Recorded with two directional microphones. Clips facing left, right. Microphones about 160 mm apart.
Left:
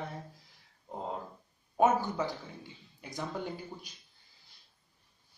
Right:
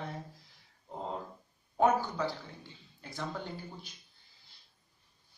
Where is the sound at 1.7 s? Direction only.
20° left (ahead or behind).